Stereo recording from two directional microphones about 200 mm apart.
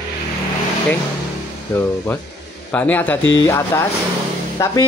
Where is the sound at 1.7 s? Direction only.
10° left (ahead or behind).